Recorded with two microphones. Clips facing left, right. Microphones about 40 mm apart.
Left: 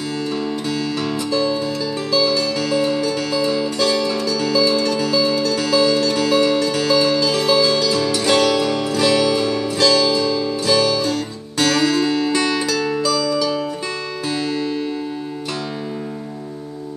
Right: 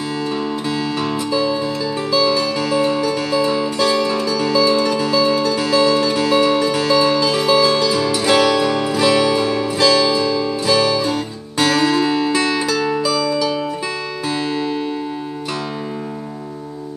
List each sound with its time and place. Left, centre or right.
1.0 s music: centre